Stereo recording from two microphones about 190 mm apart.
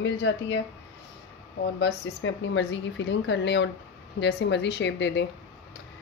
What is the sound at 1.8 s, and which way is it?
A woman's voice, 70° left (ahead or behind).